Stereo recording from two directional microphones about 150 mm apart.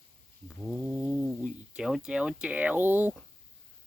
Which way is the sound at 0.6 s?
5° right (ahead or behind).